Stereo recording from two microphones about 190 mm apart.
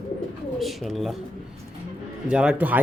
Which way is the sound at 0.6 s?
Centre (ahead or behind).